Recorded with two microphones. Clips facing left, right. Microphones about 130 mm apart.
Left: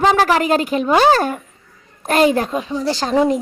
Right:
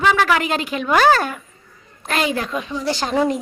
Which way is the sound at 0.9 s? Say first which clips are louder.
Left 1 dB; 25° left (ahead or behind).